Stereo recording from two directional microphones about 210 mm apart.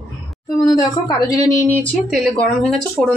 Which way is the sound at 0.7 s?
20° left (ahead or behind).